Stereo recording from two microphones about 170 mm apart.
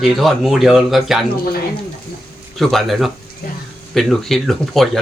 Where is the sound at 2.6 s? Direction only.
Centre (ahead or behind).